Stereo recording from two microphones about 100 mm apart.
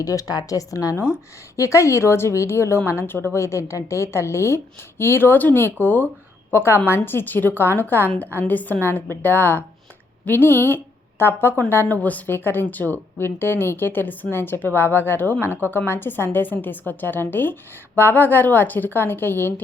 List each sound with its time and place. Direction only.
0.0 s a woman's voice: 35° left (ahead or behind)